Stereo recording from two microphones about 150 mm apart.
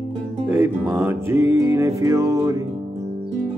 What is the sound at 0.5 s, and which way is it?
Music, 15° right (ahead or behind).